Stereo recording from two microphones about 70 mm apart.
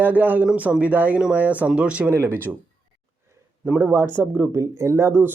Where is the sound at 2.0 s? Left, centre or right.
Right.